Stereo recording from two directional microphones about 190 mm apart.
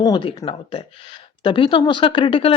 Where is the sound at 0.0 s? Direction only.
25° left (ahead or behind).